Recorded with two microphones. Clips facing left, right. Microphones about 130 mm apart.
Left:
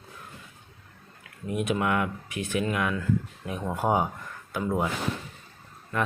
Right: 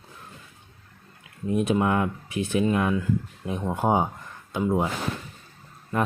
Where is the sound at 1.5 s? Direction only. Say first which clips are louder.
Right 4 dB; 30° right (ahead or behind).